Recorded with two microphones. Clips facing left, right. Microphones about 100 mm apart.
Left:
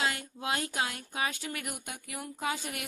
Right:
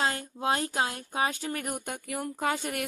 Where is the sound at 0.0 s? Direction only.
35° right (ahead or behind).